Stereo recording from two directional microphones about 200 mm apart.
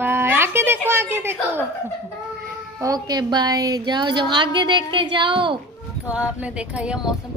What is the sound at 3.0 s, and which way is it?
A woman's voice, 20° right (ahead or behind).